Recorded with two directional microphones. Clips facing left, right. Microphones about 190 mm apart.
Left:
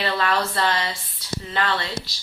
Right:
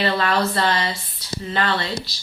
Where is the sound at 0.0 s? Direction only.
25° right (ahead or behind).